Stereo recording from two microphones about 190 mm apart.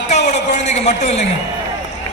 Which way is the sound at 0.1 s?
35° left (ahead or behind).